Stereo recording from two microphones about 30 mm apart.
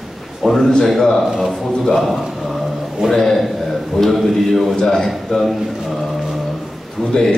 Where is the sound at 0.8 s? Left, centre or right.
Centre.